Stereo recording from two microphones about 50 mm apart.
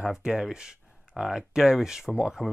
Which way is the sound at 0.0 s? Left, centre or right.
Centre.